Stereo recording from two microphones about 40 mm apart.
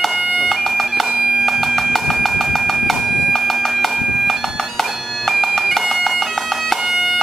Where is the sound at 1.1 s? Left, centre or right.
Right.